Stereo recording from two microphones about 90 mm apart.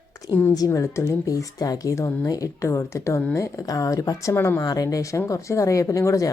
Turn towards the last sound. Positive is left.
turn(degrees=35)  # may be behind; listen again after turning